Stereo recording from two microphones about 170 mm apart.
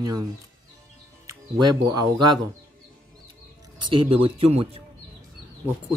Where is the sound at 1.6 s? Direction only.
25° right (ahead or behind).